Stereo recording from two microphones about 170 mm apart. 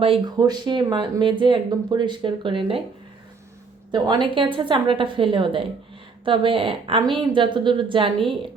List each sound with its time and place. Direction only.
0.0 s speech: 30° right (ahead or behind)
3.9 s a woman's voice: 25° right (ahead or behind)